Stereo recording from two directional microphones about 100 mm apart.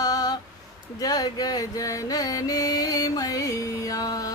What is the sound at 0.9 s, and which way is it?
Music, 40° left (ahead or behind).